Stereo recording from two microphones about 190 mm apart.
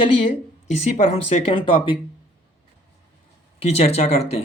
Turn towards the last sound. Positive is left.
turn(degrees=35)  # may be behind; listen again after turning